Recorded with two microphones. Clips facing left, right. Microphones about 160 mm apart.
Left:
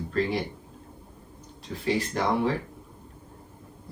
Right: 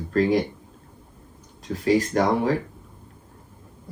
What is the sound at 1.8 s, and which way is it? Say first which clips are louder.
Speech: right 6 dB; 45° right (ahead or behind).